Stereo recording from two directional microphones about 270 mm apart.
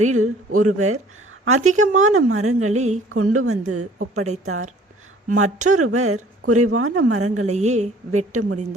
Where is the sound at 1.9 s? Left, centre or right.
Right.